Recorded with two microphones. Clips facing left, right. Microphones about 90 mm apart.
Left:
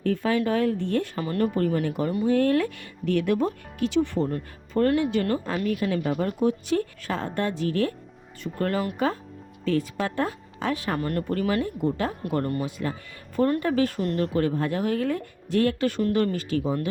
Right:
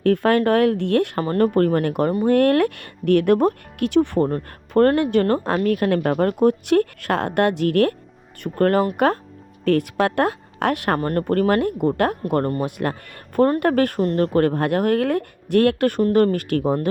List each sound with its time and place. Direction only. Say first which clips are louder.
0.0 s a woman's voice: right 7 dB; 65° right (ahead or behind)
1.2 s a woman's voice: right 6 dB; 45° right (ahead or behind); by 7.9 s 70° right (ahead or behind)
8.5 s speech: right 9 dB; 55° right (ahead or behind)
9.6 s a woman's voice: right 7 dB; 65° right (ahead or behind)
11.0 s speech: right 8 dB; 45° right (ahead or behind)
12.2 s speech: right 5 dB; 45° right (ahead or behind)
12.8 s a woman's voice: right 6 dB; 60° right (ahead or behind)
14.0 s speech: right 6 dB; 40° right (ahead or behind)
14.3 s a woman's voice: right 6 dB; 60° right (ahead or behind)